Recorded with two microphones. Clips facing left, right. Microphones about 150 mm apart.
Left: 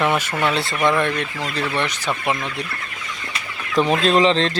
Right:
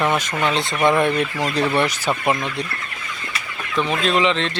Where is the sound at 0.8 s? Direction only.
30° right (ahead or behind).